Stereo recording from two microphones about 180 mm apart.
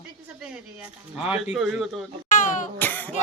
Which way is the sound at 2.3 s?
45° left (ahead or behind).